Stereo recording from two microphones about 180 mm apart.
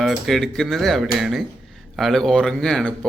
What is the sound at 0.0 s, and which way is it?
A man's voice, centre (ahead or behind).